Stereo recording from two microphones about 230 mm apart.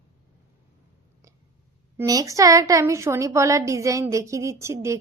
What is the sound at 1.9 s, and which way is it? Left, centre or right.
Speech, centre.